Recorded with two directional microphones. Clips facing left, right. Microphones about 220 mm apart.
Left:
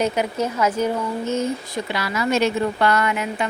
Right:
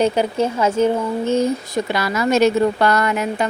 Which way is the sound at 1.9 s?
45° right (ahead or behind).